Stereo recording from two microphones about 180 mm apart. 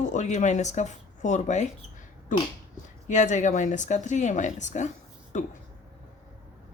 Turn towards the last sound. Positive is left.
turn(degrees=45)  # may be behind; listen again after turning